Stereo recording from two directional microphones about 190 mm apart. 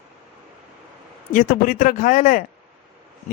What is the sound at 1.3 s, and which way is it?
Speech, 45° left (ahead or behind).